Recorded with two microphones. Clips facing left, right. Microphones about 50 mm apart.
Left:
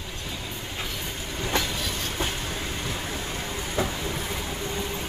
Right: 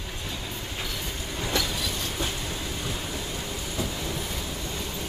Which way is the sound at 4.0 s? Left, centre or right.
Left.